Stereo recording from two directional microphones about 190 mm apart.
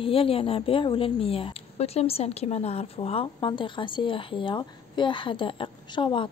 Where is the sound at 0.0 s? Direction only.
30° left (ahead or behind).